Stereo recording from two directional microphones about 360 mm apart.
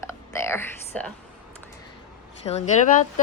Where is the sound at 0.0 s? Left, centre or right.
Centre.